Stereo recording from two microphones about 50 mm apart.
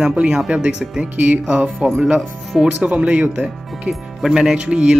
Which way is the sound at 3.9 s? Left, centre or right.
Centre.